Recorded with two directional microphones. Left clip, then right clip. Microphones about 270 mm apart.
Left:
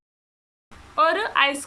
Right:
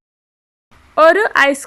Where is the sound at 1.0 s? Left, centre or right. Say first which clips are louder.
Right 9 dB; right.